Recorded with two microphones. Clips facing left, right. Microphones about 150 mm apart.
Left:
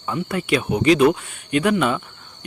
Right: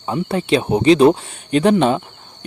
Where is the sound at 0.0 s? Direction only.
30° right (ahead or behind).